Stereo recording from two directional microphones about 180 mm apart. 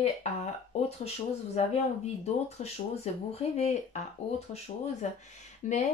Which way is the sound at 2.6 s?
40° left (ahead or behind).